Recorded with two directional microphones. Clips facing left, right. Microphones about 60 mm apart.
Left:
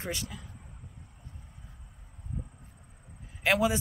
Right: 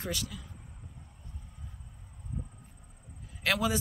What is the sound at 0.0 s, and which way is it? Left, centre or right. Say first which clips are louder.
Speech: even; left.